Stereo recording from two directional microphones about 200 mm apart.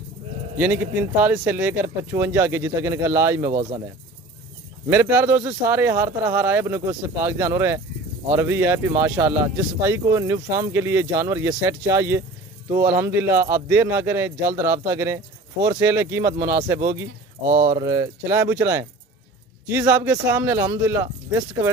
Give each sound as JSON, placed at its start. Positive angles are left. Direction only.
{"t": 1.2, "sound": "speech", "side_deg": -5}
{"t": 4.8, "sound": "speech", "side_deg": -10}
{"t": 17.5, "sound": "speech", "side_deg": -30}
{"t": 17.8, "sound": "speech", "side_deg": -15}